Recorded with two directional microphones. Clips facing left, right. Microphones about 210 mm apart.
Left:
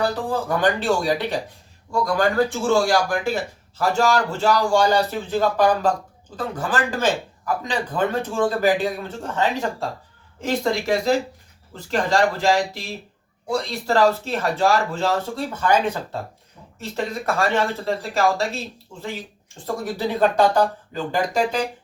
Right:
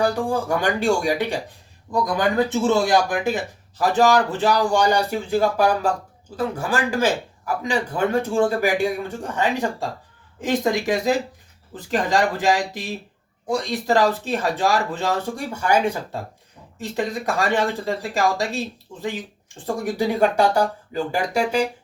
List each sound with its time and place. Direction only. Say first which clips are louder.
0.0 s speech: right 2 dB; 10° right (ahead or behind)
17.2 s speech: left 1 dB; 15° right (ahead or behind)
19.6 s speech: right 2 dB; 15° right (ahead or behind)